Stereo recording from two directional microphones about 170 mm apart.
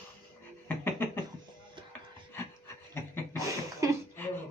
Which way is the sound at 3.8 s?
20° right (ahead or behind).